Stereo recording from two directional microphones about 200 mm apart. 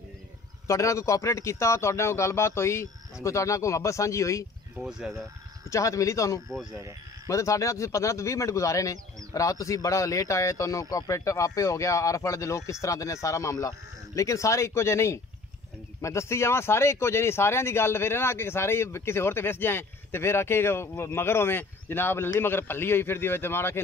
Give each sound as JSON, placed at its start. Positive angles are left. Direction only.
{"t": 0.7, "sound": "speech", "side_deg": 15}
{"t": 4.8, "sound": "speech", "side_deg": -5}
{"t": 5.7, "sound": "speech", "side_deg": 15}